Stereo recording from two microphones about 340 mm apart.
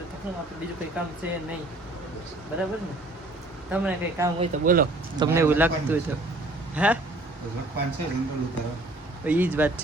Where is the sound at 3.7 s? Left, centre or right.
Centre.